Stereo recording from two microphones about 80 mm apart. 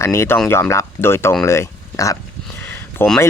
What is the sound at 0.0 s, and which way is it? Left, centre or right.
Speech, left.